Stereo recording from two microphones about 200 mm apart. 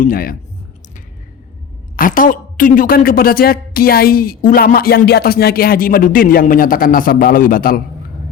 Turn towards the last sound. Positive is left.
turn(degrees=45)  # may be behind; listen again after turning